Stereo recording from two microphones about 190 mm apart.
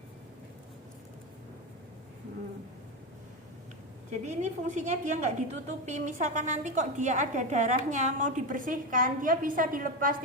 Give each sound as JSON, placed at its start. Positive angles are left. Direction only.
{"t": 4.1, "sound": "a woman's voice", "side_deg": -40}